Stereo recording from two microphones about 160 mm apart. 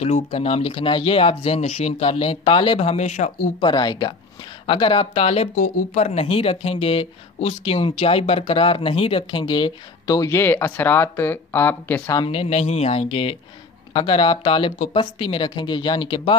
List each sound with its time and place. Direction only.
0.0 s speech: 40° left (ahead or behind)
3.6 s speech: 25° left (ahead or behind)
5.6 s speech: 60° left (ahead or behind)
6.0 s speech: 40° left (ahead or behind); by 12.2 s 15° left (ahead or behind)
12.2 s speech: 40° left (ahead or behind)